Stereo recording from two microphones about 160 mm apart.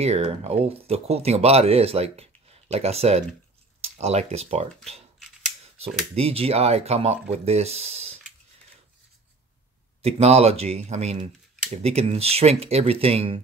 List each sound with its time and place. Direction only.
0.0 s speech: 40° right (ahead or behind)
6.1 s speech: 40° right (ahead or behind)
10.0 s speech: 40° right (ahead or behind)